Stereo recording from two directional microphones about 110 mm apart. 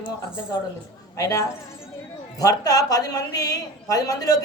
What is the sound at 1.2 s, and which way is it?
A man's voice, 30° left (ahead or behind).